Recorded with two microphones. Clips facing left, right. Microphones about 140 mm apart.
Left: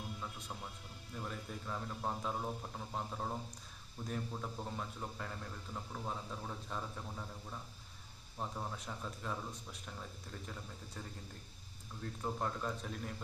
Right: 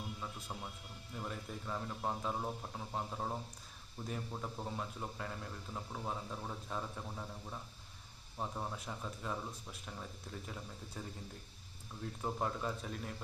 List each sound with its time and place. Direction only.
1.1 s speech: 5° right (ahead or behind)
12.2 s speech: 5° right (ahead or behind)